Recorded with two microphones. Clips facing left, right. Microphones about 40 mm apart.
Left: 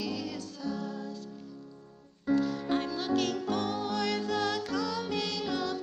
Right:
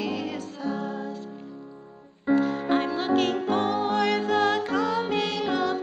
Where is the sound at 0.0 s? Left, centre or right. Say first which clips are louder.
Right 6 dB; right.